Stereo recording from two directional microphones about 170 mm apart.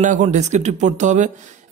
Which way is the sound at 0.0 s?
45° right (ahead or behind).